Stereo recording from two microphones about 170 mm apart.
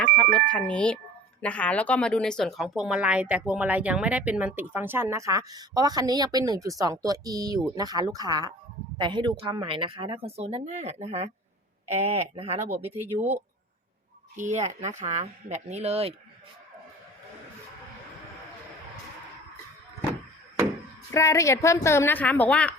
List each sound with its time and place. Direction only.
0.0 s music: 5° left (ahead or behind)
1.4 s speech: 5° left (ahead or behind); by 12.5 s 35° right (ahead or behind)
12.5 s speech: 10° right (ahead or behind)
14.3 s speech: 45° right (ahead or behind)
21.1 s a woman's voice: 20° left (ahead or behind)